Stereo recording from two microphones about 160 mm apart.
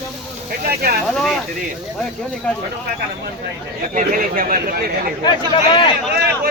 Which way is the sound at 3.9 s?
60° right (ahead or behind).